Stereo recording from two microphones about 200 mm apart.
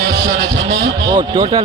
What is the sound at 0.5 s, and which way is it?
Vehicle, 60° right (ahead or behind).